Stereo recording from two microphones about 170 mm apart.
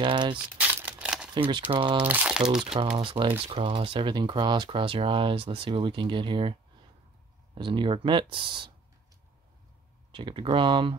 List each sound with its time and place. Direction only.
0.0 s speech: 30° right (ahead or behind)
0.6 s crumpling: 10° right (ahead or behind)
1.3 s speech: 30° right (ahead or behind)
2.0 s speech: 5° right (ahead or behind)
2.6 s speech: 30° right (ahead or behind)
10.1 s speech: 30° right (ahead or behind)